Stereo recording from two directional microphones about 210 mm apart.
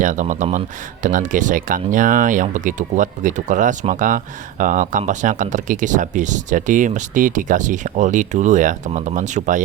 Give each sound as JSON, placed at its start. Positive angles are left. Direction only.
{"t": 0.0, "sound": "speech", "side_deg": -35}